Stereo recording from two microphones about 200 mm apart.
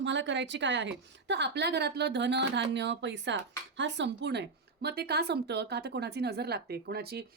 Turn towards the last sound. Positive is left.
turn(degrees=-50)  # may be behind; listen again after turning